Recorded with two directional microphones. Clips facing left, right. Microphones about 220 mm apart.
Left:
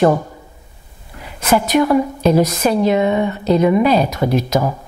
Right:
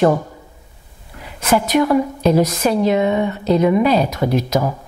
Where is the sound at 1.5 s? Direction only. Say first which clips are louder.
Left 1 dB; 15° left (ahead or behind).